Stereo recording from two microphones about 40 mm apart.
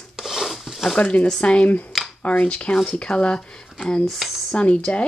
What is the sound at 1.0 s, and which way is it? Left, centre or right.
Speech, left.